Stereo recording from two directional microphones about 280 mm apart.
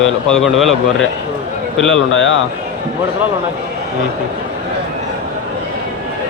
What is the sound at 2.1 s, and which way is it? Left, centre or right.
Speech, left.